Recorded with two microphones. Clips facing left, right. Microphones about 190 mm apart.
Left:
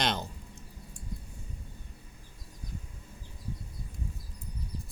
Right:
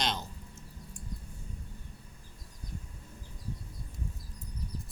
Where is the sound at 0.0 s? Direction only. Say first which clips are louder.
Left 3 dB; 55° left (ahead or behind).